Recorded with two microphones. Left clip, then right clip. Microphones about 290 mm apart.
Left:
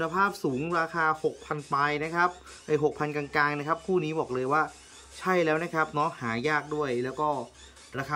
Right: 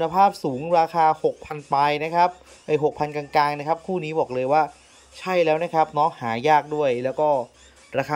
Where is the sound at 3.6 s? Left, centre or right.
Left.